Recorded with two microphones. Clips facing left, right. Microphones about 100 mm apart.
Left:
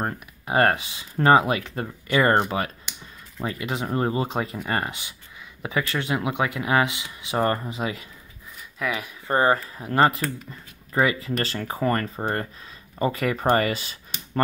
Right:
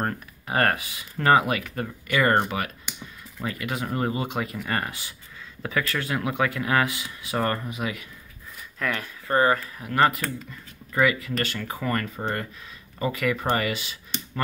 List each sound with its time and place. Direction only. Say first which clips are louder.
0.0 s speech: even; 20° left (ahead or behind)
8.7 s speech: left 1 dB; 10° left (ahead or behind)
9.3 s speech: left 1 dB; 25° left (ahead or behind)